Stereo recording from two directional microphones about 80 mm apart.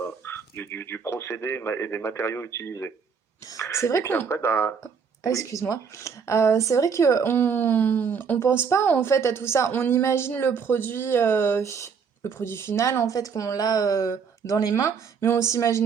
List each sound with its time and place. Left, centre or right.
0.0 s radio: left
3.6 s speech: left
5.2 s speech: left
14.8 s speech: left